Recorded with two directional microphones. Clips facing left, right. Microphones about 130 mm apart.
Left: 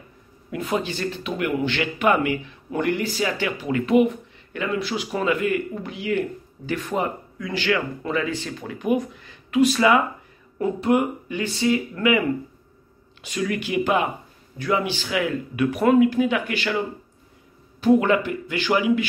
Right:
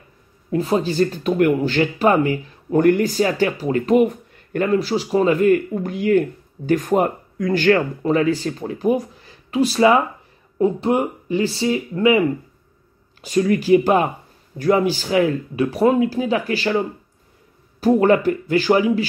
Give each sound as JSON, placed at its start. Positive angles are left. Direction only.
{"t": 0.5, "sound": "speech", "side_deg": -35}
{"t": 13.2, "sound": "speech", "side_deg": -35}